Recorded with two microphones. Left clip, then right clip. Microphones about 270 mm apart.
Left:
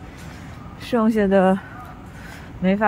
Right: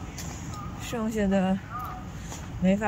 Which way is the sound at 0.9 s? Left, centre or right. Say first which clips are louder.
Left 10 dB; left.